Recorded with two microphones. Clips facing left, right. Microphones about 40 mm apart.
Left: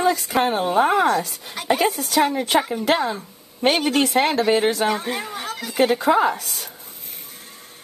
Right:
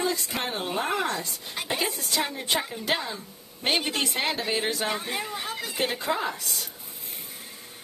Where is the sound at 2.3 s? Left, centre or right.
Left.